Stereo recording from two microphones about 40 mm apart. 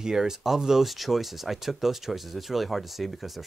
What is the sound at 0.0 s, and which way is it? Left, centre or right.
Speech, centre.